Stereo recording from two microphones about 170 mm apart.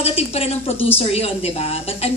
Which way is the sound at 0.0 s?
40° left (ahead or behind).